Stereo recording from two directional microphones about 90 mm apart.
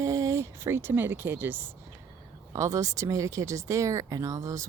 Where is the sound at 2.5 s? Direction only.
35° right (ahead or behind).